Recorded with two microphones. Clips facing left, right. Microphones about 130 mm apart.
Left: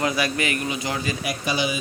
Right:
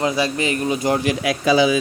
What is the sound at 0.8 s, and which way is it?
Speech, 50° right (ahead or behind).